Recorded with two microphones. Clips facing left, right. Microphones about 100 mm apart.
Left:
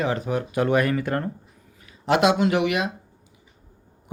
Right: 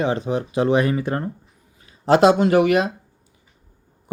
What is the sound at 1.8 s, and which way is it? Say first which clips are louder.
Speech: right 5 dB; 35° right (ahead or behind).